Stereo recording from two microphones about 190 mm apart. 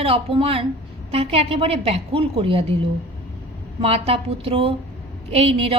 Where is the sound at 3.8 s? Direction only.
30° right (ahead or behind).